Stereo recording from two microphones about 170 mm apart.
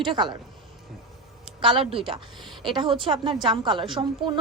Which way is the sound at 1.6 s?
30° right (ahead or behind).